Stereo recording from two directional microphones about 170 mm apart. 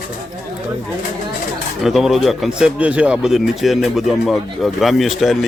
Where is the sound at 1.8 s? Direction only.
Centre (ahead or behind).